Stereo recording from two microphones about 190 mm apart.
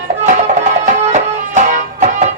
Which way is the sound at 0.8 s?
40° right (ahead or behind).